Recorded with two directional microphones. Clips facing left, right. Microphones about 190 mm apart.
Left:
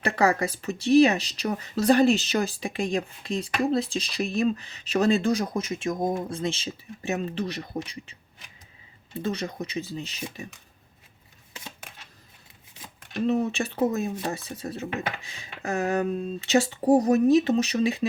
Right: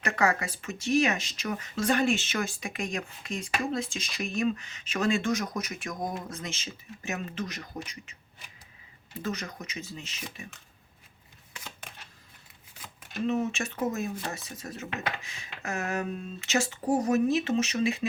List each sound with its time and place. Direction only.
0.0 s speech: 35° left (ahead or behind)
9.1 s speech: 30° left (ahead or behind)
13.2 s speech: 35° left (ahead or behind)